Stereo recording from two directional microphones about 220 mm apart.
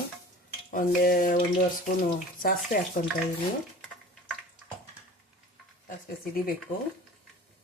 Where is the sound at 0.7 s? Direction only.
40° left (ahead or behind).